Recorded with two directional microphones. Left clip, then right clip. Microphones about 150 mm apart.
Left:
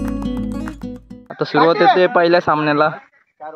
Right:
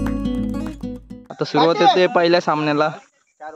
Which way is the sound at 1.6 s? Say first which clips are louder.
Left 2 dB; 10° right (ahead or behind).